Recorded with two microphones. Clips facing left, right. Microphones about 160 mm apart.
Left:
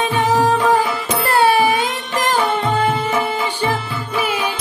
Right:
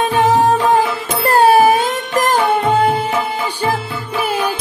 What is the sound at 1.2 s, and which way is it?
Music, 40° right (ahead or behind).